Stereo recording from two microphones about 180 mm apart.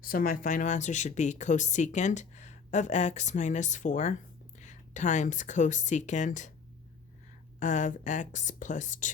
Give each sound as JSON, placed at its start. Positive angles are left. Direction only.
{"t": 0.0, "sound": "a woman's voice", "side_deg": 50}
{"t": 7.6, "sound": "a woman's voice", "side_deg": 45}